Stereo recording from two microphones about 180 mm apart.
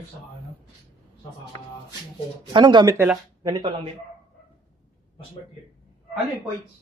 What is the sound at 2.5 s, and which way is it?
Speech, 25° right (ahead or behind).